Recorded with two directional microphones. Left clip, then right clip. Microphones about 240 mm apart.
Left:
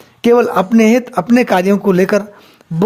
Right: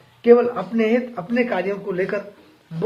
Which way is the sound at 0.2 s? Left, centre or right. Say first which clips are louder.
Left 4 dB; left.